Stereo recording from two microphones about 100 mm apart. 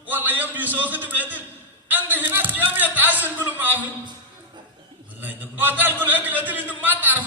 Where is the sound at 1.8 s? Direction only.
20° right (ahead or behind).